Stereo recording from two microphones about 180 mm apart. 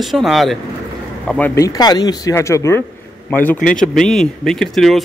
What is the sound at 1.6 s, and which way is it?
Speech, 20° left (ahead or behind).